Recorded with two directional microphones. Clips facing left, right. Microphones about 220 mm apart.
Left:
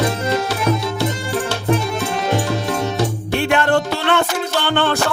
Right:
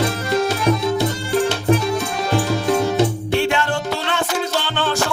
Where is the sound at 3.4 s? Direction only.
55° left (ahead or behind).